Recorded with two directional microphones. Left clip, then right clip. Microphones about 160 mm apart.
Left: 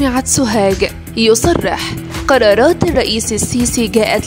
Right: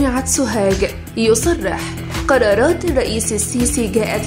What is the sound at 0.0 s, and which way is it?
Speech, 50° left (ahead or behind).